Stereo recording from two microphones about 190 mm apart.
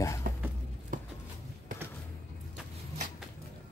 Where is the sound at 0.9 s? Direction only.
45° right (ahead or behind).